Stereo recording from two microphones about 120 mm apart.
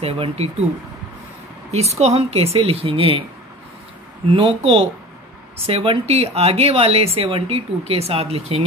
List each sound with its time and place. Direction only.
0.0 s a woman's voice: 60° right (ahead or behind)
1.7 s a woman's voice: 60° right (ahead or behind)
4.3 s a woman's voice: 45° right (ahead or behind)